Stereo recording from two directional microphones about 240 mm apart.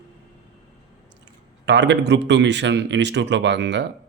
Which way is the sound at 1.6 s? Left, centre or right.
Right.